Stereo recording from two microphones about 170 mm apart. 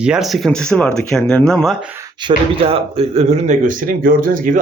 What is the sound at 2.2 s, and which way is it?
Speech, 30° right (ahead or behind).